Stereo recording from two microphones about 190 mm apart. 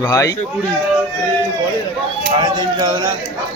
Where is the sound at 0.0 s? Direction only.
15° left (ahead or behind).